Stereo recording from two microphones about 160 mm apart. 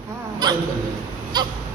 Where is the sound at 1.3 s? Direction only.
25° right (ahead or behind).